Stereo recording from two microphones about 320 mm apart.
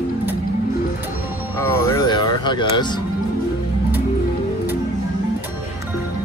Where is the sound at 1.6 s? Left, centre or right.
Centre.